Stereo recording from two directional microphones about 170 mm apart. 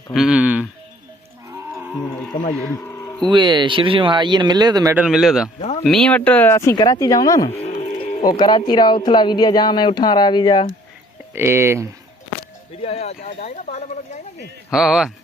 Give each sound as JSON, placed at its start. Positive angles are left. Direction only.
{"t": 0.1, "sound": "speech", "side_deg": -5}
{"t": 1.5, "sound": "cattle", "side_deg": -15}
{"t": 2.6, "sound": "a sound", "side_deg": 15}
{"t": 3.2, "sound": "speech", "side_deg": -30}
{"t": 4.9, "sound": "a man's voice", "side_deg": -5}
{"t": 5.5, "sound": "speech", "side_deg": 35}
{"t": 5.8, "sound": "speech", "side_deg": 5}
{"t": 7.4, "sound": "music", "side_deg": 40}
{"t": 7.9, "sound": "music", "side_deg": 35}
{"t": 8.2, "sound": "speech", "side_deg": 25}
{"t": 11.3, "sound": "speech", "side_deg": -15}
{"t": 12.8, "sound": "speech", "side_deg": 40}
{"t": 14.7, "sound": "a man's voice", "side_deg": -5}